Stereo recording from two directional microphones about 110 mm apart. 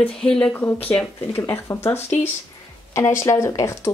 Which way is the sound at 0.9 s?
20° left (ahead or behind).